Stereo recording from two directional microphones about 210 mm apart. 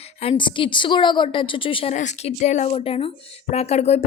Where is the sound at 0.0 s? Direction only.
30° left (ahead or behind).